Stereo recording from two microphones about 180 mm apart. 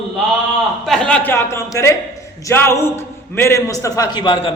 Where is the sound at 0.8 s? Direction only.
5° left (ahead or behind).